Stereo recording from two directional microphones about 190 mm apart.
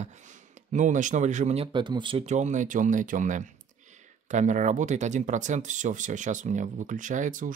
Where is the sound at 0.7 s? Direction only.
40° right (ahead or behind).